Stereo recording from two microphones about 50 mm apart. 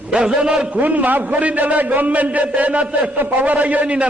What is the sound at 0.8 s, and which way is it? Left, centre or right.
A man's voice, right.